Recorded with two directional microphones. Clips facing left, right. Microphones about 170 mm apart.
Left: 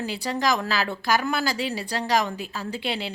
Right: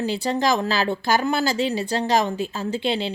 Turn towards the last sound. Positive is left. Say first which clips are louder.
# right 6 dB
turn(degrees=-25)  # may be behind; listen again after turning